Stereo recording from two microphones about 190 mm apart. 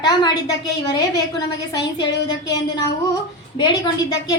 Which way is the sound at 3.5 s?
20° left (ahead or behind).